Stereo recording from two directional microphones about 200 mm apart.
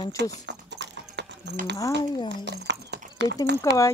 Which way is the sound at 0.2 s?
60° right (ahead or behind).